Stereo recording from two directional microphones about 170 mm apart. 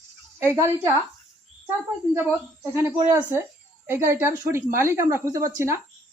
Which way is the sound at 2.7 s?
15° right (ahead or behind).